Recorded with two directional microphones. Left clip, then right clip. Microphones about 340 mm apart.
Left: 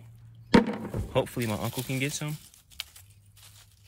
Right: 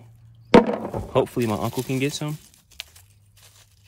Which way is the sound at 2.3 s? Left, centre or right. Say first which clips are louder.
Right 2 dB; right.